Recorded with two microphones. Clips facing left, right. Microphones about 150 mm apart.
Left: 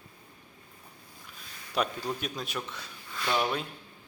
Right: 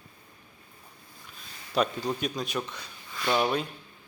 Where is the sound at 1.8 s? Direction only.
5° left (ahead or behind).